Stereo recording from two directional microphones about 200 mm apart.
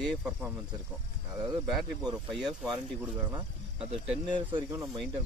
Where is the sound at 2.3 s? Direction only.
Centre (ahead or behind).